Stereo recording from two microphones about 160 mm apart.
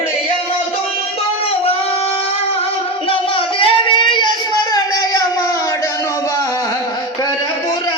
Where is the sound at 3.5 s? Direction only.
30° left (ahead or behind).